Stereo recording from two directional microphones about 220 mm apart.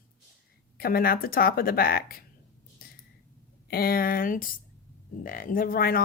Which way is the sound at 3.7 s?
45° left (ahead or behind).